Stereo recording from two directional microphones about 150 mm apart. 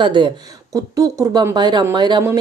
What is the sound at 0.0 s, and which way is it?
Speech, 30° right (ahead or behind).